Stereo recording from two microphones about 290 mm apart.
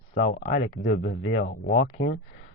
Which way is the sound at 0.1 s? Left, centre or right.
Left.